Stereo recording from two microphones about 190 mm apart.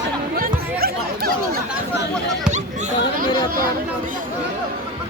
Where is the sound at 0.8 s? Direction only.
55° right (ahead or behind).